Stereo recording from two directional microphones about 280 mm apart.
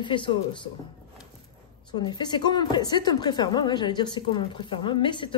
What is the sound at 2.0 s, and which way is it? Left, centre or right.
Speech, centre.